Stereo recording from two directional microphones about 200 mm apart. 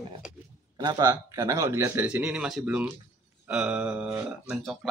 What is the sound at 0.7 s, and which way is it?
A man's voice, 20° right (ahead or behind).